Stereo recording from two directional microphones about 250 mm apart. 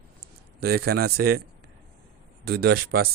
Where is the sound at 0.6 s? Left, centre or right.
Right.